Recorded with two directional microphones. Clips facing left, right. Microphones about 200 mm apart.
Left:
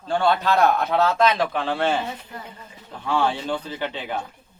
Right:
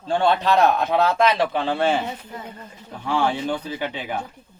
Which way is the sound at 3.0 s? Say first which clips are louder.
Right 1 dB; 15° right (ahead or behind).